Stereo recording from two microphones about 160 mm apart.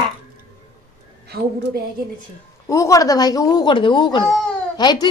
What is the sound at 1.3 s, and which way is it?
Speech, 80° right.